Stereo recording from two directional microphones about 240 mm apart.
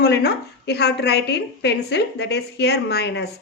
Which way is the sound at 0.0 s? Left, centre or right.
Left.